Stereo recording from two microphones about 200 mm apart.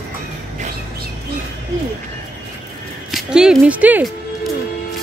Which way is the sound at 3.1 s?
5° right (ahead or behind).